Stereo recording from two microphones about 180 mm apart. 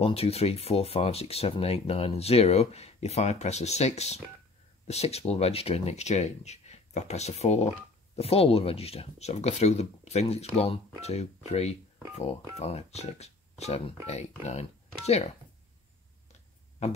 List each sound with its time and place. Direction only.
0.0 s speech: 35° left (ahead or behind)
15.0 s speech: 35° left (ahead or behind)
16.8 s speech: 35° left (ahead or behind)